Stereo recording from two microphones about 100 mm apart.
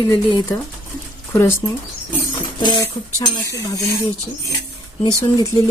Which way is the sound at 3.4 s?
35° left (ahead or behind).